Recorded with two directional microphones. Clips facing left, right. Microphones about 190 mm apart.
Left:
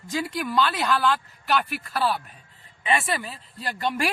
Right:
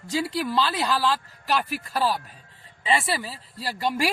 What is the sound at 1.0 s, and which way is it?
Speech, 35° right (ahead or behind).